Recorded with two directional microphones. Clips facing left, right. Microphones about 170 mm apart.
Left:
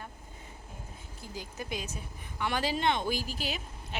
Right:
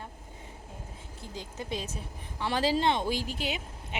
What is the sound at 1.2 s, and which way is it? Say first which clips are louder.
Speech: right 1 dB; 25° right (ahead or behind).